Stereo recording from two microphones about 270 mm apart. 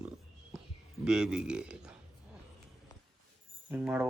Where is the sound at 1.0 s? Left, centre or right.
Centre.